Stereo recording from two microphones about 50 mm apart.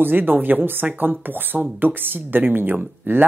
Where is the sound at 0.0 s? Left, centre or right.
Right.